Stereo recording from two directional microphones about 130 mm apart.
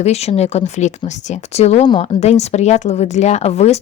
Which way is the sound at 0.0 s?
55° left (ahead or behind).